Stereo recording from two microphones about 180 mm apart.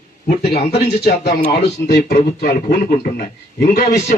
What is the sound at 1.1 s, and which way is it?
A man's voice, 60° left (ahead or behind).